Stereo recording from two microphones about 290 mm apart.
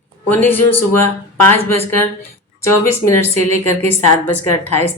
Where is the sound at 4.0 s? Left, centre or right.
Left.